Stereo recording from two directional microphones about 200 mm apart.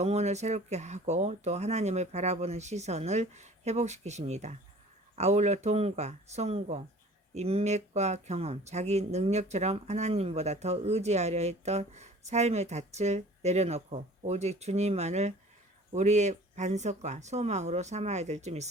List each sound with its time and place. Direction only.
0.0 s speech: 35° right (ahead or behind)